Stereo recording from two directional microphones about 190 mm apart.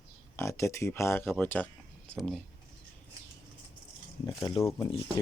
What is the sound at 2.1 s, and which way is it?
Speech, centre (ahead or behind).